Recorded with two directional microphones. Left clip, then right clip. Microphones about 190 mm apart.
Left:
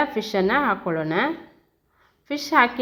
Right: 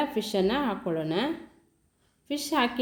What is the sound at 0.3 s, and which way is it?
Speech, 5° right (ahead or behind).